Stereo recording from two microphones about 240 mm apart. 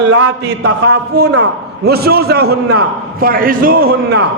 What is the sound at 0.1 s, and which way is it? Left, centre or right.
A man's voice, right.